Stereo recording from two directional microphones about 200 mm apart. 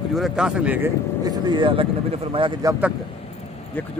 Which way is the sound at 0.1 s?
Centre (ahead or behind).